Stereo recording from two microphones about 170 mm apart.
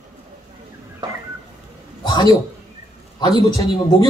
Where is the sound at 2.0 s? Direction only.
25° left (ahead or behind).